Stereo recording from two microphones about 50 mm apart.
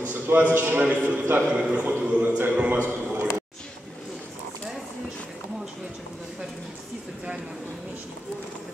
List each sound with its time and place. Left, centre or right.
0.1 s a man's voice: right
1.5 s a man's voice: right
2.7 s a sound: right